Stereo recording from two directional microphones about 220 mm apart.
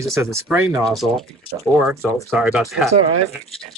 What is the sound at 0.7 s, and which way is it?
Speech, centre (ahead or behind).